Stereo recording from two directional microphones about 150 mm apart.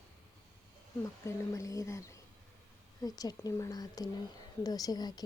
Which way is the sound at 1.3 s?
20° left (ahead or behind).